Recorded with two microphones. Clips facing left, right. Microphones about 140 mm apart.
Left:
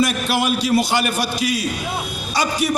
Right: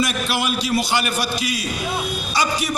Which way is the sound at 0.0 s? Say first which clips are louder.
Left 3 dB; 50° left (ahead or behind).